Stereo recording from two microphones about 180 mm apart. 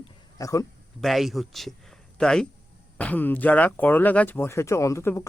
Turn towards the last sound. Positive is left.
turn(degrees=15)  # may be behind; listen again after turning